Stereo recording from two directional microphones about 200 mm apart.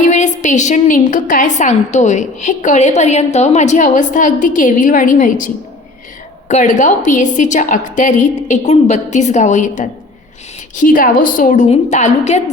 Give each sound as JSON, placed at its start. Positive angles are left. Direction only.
{"t": 0.0, "sound": "a woman's voice", "side_deg": 35}
{"t": 6.5, "sound": "a woman's voice", "side_deg": 35}